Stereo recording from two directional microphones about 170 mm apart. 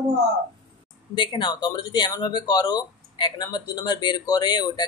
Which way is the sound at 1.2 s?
25° left (ahead or behind).